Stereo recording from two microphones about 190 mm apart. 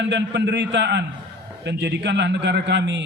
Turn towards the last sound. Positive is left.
turn(degrees=-70)  # may be behind; listen again after turning